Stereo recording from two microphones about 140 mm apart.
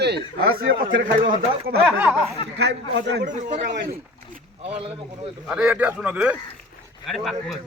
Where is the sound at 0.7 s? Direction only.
75° right (ahead or behind).